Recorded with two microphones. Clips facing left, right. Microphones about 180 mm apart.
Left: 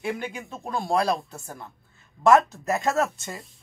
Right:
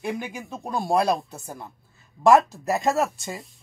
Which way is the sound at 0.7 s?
20° right (ahead or behind).